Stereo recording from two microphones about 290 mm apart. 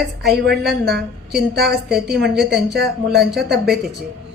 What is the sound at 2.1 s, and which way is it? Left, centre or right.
Speech, right.